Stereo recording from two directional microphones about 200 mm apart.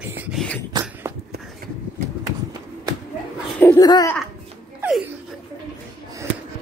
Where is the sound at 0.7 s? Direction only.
20° right (ahead or behind).